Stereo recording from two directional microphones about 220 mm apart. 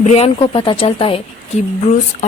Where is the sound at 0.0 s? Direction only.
30° left (ahead or behind).